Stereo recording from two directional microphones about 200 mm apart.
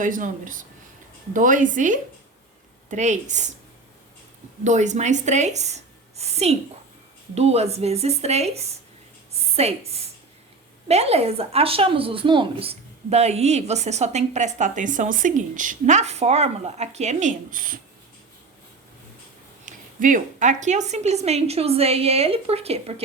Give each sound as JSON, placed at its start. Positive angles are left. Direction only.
{"t": 0.0, "sound": "speech", "side_deg": -40}
{"t": 4.6, "sound": "a woman's voice", "side_deg": -35}
{"t": 9.3, "sound": "a sound", "side_deg": -30}
{"t": 10.8, "sound": "speech", "side_deg": -30}
{"t": 19.6, "sound": "speech", "side_deg": -40}